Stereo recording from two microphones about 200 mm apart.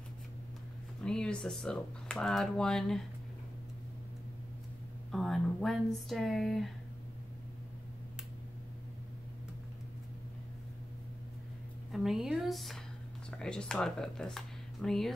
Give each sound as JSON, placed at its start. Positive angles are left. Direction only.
{"t": 1.0, "sound": "speech", "side_deg": 5}
{"t": 5.1, "sound": "speech", "side_deg": 0}
{"t": 11.9, "sound": "a woman's voice", "side_deg": 0}